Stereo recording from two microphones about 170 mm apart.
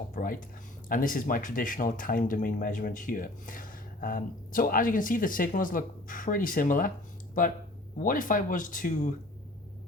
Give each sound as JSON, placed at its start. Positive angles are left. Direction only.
{"t": 0.1, "sound": "speech", "side_deg": 55}
{"t": 7.9, "sound": "speech", "side_deg": 55}